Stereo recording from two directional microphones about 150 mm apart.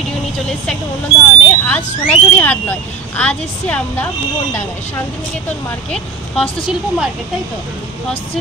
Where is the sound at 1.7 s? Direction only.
10° left (ahead or behind).